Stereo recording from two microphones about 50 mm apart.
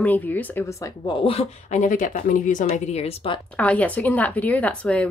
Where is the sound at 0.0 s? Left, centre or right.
Left.